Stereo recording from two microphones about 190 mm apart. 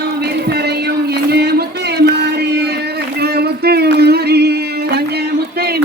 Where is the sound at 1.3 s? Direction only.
60° right (ahead or behind).